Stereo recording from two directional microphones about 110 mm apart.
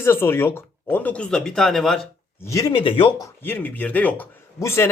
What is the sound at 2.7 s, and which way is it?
Speech, 50° left (ahead or behind).